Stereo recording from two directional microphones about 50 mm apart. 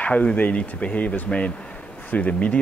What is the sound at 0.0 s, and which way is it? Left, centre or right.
Speech, left.